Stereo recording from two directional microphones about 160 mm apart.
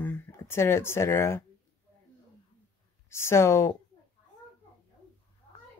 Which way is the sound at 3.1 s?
15° left (ahead or behind).